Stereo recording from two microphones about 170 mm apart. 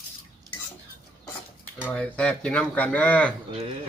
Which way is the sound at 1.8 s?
10° left (ahead or behind).